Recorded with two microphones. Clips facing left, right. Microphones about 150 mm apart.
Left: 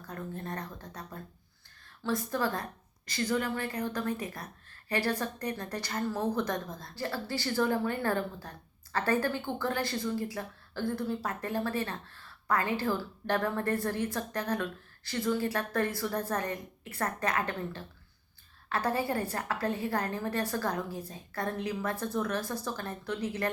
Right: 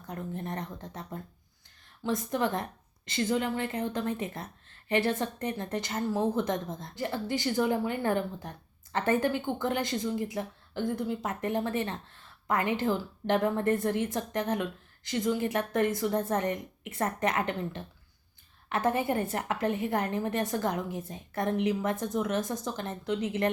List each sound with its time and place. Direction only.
0.0 s a woman's voice: 20° right (ahead or behind)